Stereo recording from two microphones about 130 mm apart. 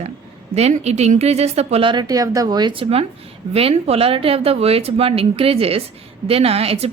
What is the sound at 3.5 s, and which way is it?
A woman's voice, 50° right (ahead or behind).